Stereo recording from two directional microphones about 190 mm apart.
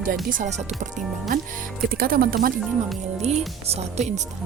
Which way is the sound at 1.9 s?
50° right (ahead or behind).